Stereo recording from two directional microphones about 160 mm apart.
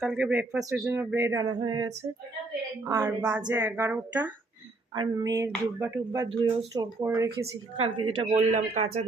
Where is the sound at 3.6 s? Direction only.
10° right (ahead or behind).